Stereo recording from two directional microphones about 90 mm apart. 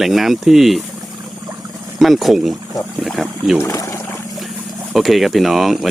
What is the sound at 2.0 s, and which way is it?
Speech, centre (ahead or behind).